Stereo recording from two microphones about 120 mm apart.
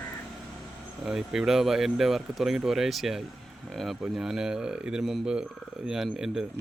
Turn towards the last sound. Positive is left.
turn(degrees=-5)  # may be behind; listen again after turning